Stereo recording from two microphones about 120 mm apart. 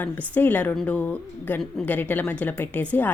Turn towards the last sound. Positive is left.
turn(degrees=15)  # may be behind; listen again after turning